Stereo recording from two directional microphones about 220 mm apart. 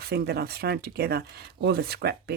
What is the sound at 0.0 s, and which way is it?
Speech, 45° right (ahead or behind).